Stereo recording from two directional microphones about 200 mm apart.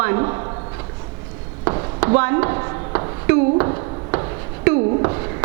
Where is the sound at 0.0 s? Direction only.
20° right (ahead or behind).